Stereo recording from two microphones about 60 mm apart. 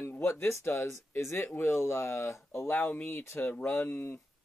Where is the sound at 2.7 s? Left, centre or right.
Left.